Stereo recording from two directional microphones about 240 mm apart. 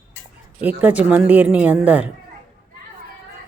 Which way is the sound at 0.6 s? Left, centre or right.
Centre.